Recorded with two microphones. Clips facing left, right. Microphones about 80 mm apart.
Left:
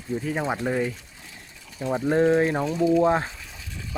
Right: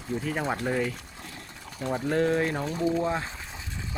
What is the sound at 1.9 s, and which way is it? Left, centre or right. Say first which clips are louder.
Speech: left 5 dB; left.